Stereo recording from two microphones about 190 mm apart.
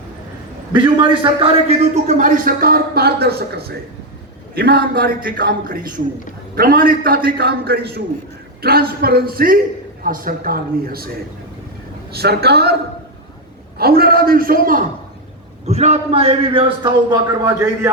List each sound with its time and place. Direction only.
0.7 s a man's voice: 25° right (ahead or behind); by 11.1 s 50° right (ahead or behind)
12.1 s a woman's voice: 55° right (ahead or behind)
13.7 s a man's voice: 55° right (ahead or behind)
15.6 s a man's voice: 35° right (ahead or behind)